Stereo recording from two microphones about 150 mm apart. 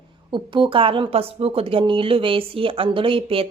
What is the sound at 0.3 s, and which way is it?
Speech, 30° right (ahead or behind).